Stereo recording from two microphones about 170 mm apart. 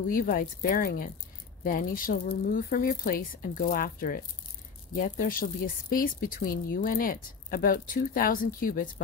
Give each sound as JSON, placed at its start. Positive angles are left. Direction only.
{"t": 0.0, "sound": "speech", "side_deg": 55}